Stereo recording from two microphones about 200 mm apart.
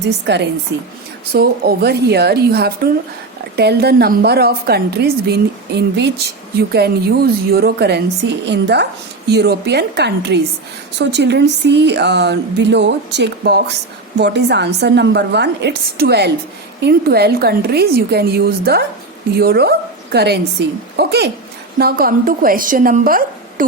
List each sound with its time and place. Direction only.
0.0 s a woman's voice: 60° right (ahead or behind)